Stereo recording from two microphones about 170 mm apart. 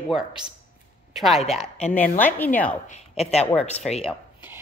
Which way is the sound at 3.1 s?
35° left (ahead or behind).